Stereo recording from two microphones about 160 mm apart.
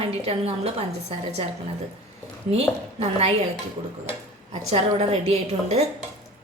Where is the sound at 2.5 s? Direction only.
40° right (ahead or behind).